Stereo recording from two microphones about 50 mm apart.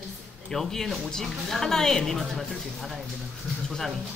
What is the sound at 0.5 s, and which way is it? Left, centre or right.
A woman's voice, centre.